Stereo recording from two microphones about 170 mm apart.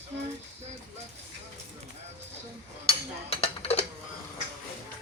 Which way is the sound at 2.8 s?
35° left (ahead or behind).